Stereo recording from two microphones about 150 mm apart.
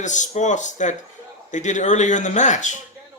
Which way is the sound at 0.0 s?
55° left (ahead or behind).